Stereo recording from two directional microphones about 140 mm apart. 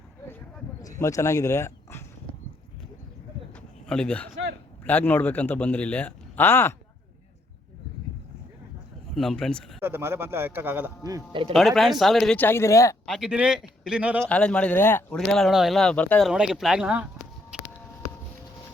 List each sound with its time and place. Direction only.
0.8 s speech: 25° left (ahead or behind)
3.8 s a man's voice: 5° left (ahead or behind)
9.1 s a man's voice: 5° left (ahead or behind)
9.8 s a man's voice: 15° right (ahead or behind)
11.0 s a man's voice: 30° right (ahead or behind)
11.5 s a man's voice: centre (ahead or behind)
12.4 s speech: 15° left (ahead or behind)
13.1 s a man's voice: centre (ahead or behind)
14.2 s a man's voice: 5° left (ahead or behind)
15.3 s a man's voice: centre (ahead or behind)
16.3 s a man's voice: 5° right (ahead or behind)